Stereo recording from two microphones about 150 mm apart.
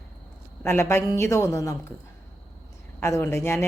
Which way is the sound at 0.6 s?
15° left (ahead or behind).